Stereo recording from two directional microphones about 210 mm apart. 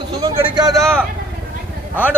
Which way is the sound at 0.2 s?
20° right (ahead or behind).